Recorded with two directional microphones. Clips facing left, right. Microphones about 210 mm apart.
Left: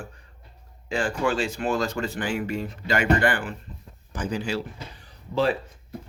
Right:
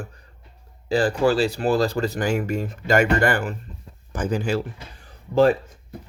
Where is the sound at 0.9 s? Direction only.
35° right (ahead or behind).